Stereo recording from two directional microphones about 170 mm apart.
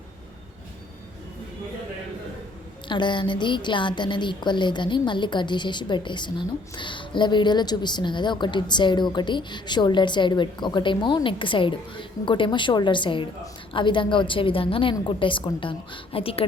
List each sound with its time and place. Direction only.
2.9 s a woman's voice: 25° left (ahead or behind)